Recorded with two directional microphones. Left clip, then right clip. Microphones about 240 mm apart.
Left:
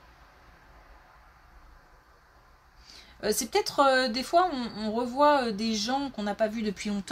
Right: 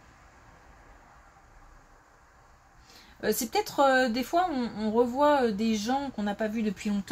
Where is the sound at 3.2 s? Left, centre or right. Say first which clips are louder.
Left 1 dB; left.